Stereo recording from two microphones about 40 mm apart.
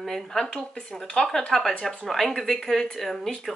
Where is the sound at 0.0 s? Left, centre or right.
Centre.